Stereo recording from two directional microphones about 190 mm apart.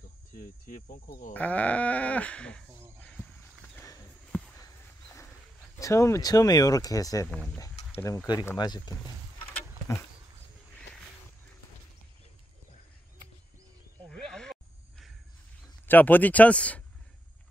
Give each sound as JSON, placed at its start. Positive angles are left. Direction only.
{"t": 0.4, "sound": "speech", "side_deg": 45}
{"t": 1.3, "sound": "speech", "side_deg": 10}
{"t": 3.7, "sound": "horse", "side_deg": 15}
{"t": 5.8, "sound": "speech", "side_deg": 15}
{"t": 9.5, "sound": "a sound", "side_deg": 10}
{"t": 14.0, "sound": "a sound", "side_deg": 0}
{"t": 15.9, "sound": "speech", "side_deg": 10}